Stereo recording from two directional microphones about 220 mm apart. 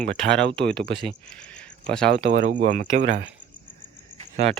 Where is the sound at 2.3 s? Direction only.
40° right (ahead or behind).